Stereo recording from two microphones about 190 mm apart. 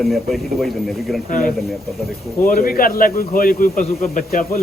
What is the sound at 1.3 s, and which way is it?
Speech, 45° left (ahead or behind).